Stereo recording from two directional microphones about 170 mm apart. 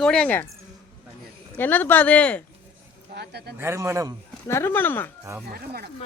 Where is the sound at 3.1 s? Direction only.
75° right (ahead or behind).